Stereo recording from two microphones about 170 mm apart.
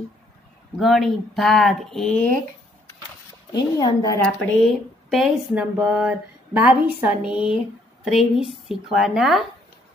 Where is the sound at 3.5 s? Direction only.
25° left (ahead or behind).